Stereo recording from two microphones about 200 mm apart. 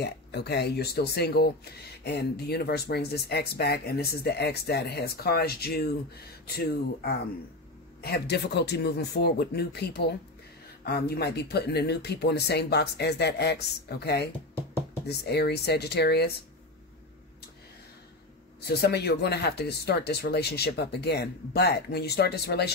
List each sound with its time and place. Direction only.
0.0 s speech: 55° left (ahead or behind)
18.7 s speech: 55° left (ahead or behind)